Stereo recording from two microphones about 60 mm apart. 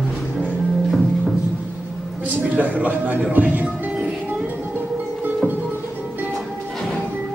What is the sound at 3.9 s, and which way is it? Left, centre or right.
Music, right.